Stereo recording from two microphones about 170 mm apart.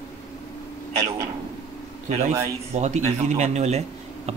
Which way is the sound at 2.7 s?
40° right (ahead or behind).